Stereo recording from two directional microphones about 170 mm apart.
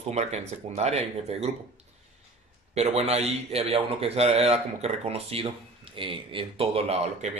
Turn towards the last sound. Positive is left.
turn(degrees=-40)  # may be behind; listen again after turning